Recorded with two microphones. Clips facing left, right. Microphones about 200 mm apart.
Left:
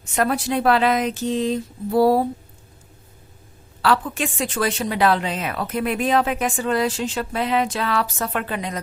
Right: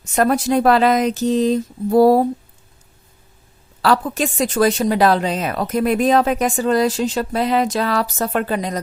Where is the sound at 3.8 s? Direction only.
40° right (ahead or behind).